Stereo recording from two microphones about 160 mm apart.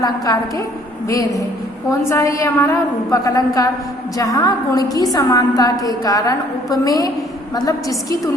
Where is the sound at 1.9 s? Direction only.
20° left (ahead or behind).